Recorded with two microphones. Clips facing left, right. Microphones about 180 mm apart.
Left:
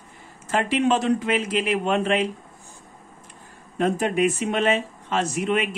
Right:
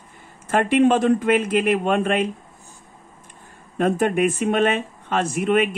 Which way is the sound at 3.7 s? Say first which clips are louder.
Right 3 dB; 55° right (ahead or behind).